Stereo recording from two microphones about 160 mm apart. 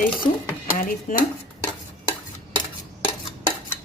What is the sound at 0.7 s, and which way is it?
Speech, 55° left (ahead or behind).